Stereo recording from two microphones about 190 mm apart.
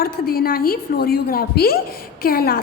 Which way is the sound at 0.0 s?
50° left (ahead or behind).